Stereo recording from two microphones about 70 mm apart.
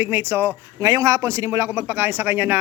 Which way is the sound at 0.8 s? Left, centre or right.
Right.